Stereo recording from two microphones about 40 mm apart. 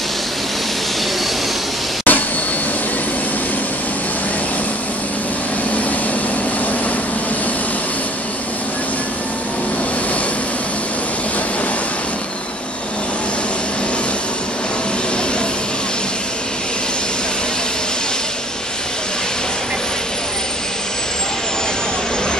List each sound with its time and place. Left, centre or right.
2.1 s vehicle: left